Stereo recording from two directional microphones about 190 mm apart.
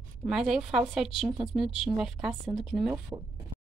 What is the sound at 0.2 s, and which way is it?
Speech, centre (ahead or behind).